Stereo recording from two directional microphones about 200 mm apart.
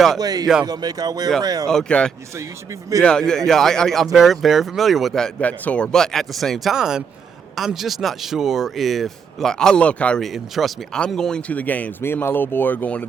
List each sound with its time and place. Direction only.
0.2 s speech: 20° right (ahead or behind)
1.6 s speech: 5° left (ahead or behind)